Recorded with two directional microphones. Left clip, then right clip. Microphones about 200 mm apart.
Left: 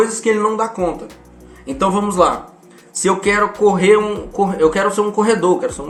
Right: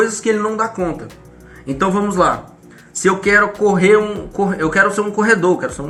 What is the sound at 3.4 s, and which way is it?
Speech, centre (ahead or behind).